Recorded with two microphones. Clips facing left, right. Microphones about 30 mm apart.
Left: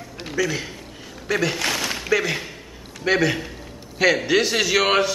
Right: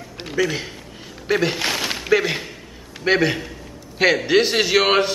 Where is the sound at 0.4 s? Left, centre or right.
Centre.